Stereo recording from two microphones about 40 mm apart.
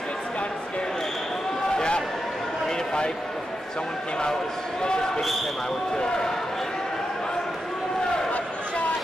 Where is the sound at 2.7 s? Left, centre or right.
Centre.